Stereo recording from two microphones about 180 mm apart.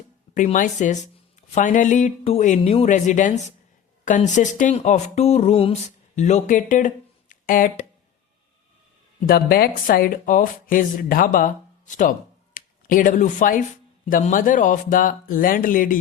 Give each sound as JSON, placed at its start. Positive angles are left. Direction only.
{"t": 0.3, "sound": "speech", "side_deg": 45}
{"t": 9.2, "sound": "speech", "side_deg": 55}
{"t": 12.5, "sound": "speech", "side_deg": 50}